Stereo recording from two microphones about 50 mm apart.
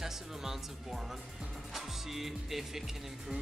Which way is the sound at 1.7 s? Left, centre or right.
Centre.